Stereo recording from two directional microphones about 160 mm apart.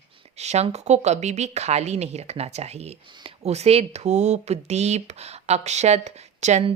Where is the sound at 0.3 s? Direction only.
45° right (ahead or behind).